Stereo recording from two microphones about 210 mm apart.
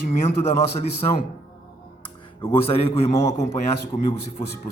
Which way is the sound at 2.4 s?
25° left (ahead or behind).